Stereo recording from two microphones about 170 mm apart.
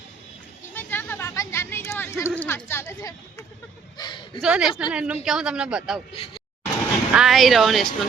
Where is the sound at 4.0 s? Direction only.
25° left (ahead or behind).